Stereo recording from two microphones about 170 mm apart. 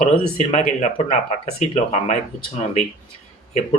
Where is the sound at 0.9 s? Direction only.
35° left (ahead or behind).